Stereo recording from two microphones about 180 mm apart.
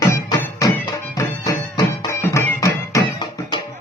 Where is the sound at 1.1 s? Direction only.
20° left (ahead or behind).